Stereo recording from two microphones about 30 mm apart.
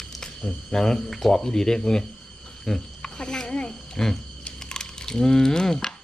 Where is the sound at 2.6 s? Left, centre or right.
Centre.